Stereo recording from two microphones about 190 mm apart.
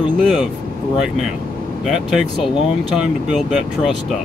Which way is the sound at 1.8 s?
Centre (ahead or behind).